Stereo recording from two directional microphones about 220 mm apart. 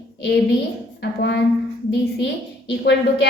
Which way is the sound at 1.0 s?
50° left (ahead or behind).